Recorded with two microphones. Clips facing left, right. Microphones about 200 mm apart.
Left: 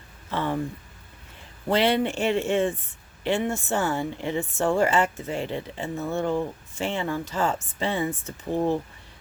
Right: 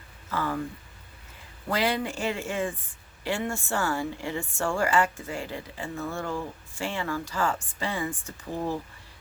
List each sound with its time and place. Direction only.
0.3 s a woman's voice: 25° left (ahead or behind)
1.7 s a woman's voice: 25° left (ahead or behind)